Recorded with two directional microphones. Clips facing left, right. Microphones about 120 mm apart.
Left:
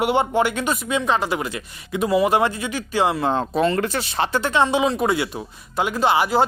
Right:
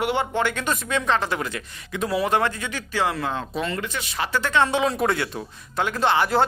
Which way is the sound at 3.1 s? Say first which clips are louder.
Left 7 dB; 30° left (ahead or behind).